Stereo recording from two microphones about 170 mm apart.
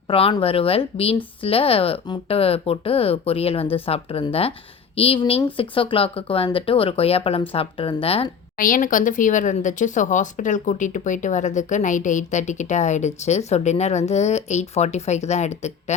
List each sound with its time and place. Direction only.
0.1 s speech: 30° left (ahead or behind)
8.5 s speech: 55° left (ahead or behind)